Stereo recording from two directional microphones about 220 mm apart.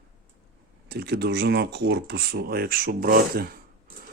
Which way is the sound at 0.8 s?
45° right (ahead or behind).